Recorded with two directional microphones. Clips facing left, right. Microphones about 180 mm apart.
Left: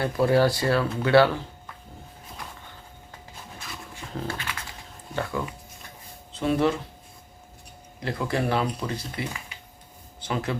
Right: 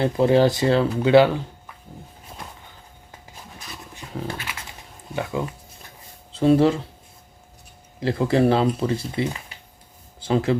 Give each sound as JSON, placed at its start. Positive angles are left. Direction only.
{"t": 0.0, "sound": "speech", "side_deg": -20}
{"t": 4.3, "sound": "a sound", "side_deg": -15}
{"t": 5.1, "sound": "speech", "side_deg": -20}
{"t": 6.3, "sound": "speech", "side_deg": -30}
{"t": 8.0, "sound": "speech", "side_deg": -30}